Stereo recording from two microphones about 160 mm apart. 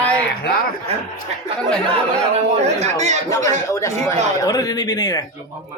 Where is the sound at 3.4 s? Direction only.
20° left (ahead or behind).